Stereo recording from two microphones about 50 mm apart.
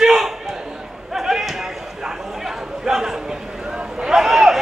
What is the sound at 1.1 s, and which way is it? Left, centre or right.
Basketball bounce, centre.